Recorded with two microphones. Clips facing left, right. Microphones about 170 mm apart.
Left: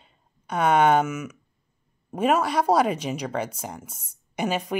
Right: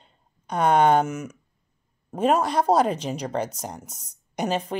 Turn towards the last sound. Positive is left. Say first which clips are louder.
# right 1 dB
turn(degrees=5)  # may be behind; listen again after turning